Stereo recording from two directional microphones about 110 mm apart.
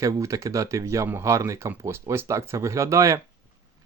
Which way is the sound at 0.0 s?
30° right (ahead or behind).